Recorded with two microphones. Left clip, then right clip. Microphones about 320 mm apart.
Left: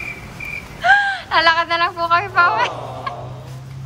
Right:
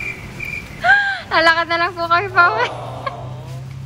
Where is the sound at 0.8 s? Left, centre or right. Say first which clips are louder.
Even; centre.